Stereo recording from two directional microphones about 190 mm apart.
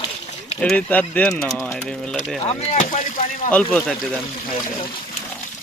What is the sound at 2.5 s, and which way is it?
Speech, 40° left (ahead or behind).